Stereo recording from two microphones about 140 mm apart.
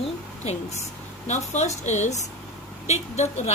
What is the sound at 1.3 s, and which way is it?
A woman's voice, 55° left (ahead or behind).